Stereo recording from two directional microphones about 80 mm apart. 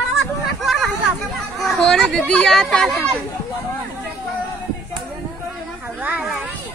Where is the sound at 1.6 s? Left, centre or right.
Centre.